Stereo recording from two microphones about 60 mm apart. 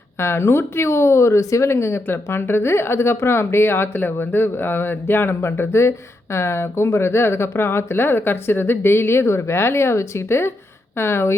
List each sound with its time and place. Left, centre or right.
0.2 s speech: left